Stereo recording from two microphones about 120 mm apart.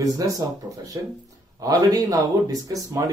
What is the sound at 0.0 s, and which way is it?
Speech, 30° right (ahead or behind).